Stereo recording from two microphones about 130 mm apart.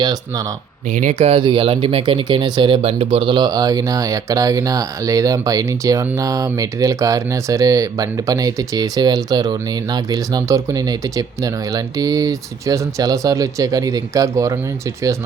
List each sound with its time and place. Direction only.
0.0 s speech: 30° right (ahead or behind)
0.9 s speech: 70° right (ahead or behind)
1.4 s speech: 40° right (ahead or behind); by 15.1 s 25° right (ahead or behind)